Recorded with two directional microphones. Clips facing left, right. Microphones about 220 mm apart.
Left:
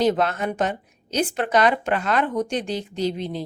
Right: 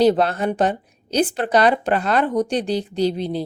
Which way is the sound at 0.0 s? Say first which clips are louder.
Right 4 dB; 35° right (ahead or behind).